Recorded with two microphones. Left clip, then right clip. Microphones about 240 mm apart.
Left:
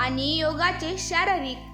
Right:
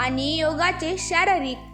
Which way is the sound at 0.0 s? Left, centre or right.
Centre.